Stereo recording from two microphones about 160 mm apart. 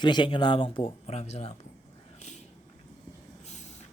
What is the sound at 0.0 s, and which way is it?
Speech, 30° left (ahead or behind).